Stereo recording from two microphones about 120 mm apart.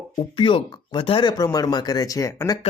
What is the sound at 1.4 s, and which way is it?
Speech, 30° left (ahead or behind).